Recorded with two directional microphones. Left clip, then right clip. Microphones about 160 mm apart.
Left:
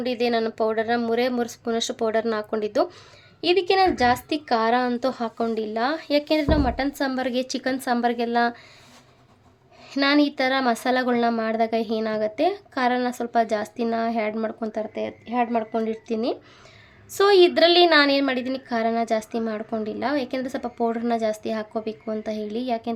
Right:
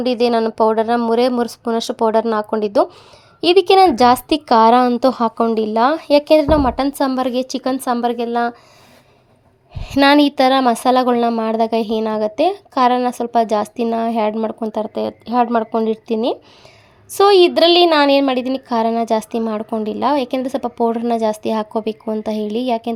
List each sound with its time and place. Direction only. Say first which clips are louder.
0.0 s a woman's voice: right 7 dB; 40° right (ahead or behind)
3.4 s a woman's voice: right 9 dB; 45° right (ahead or behind); by 8.5 s 20° right (ahead or behind)
9.8 s a woman's voice: right 9 dB; 50° right (ahead or behind); by 14.8 s 35° right (ahead or behind)
14.9 s a woman's voice: right 9 dB; 70° right (ahead or behind)
15.5 s a woman's voice: right 8 dB; 40° right (ahead or behind)